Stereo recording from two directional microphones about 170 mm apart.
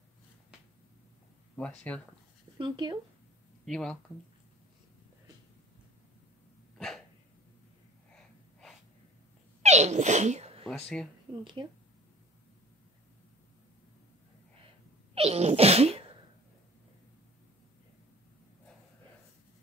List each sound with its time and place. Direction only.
1.6 s speech: 10° left (ahead or behind)
2.6 s speech: 25° right (ahead or behind)
3.6 s speech: 5° left (ahead or behind)
9.6 s sneeze: 40° right (ahead or behind)
10.7 s speech: 5° left (ahead or behind)
11.6 s speech: 25° right (ahead or behind)
15.1 s sneeze: 35° right (ahead or behind)